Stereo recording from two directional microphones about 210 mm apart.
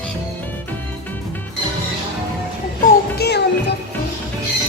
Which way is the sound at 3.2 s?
50° left (ahead or behind).